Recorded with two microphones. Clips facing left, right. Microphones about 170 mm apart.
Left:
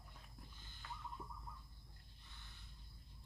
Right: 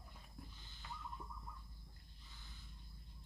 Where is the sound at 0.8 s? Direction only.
15° right (ahead or behind).